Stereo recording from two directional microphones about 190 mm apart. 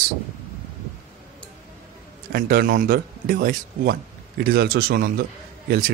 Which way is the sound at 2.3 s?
55° right (ahead or behind).